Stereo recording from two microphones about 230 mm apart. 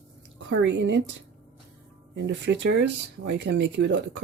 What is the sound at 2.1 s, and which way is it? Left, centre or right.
Speech, right.